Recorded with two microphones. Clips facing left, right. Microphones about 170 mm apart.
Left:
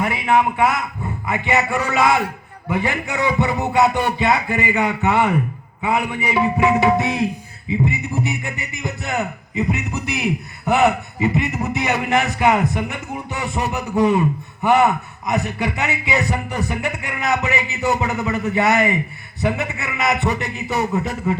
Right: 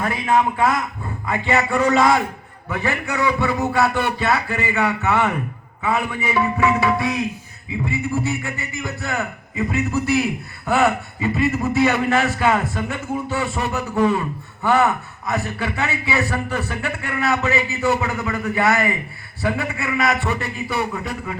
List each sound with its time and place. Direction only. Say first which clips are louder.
0.0 s a man's voice: left 1 dB; 15° left (ahead or behind)